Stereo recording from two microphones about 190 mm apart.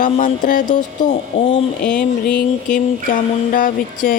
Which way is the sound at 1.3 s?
35° left (ahead or behind).